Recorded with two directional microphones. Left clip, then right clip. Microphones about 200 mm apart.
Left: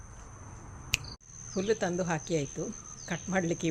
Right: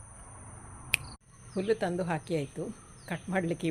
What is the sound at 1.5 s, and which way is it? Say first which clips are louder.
Speech: even; centre (ahead or behind).